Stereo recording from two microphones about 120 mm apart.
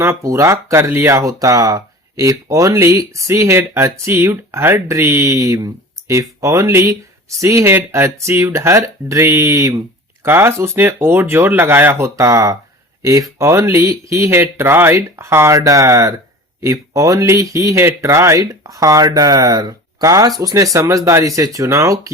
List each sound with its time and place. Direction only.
0.0 s speech: 25° right (ahead or behind)